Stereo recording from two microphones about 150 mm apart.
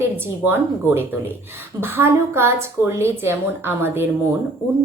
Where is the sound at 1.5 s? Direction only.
15° right (ahead or behind).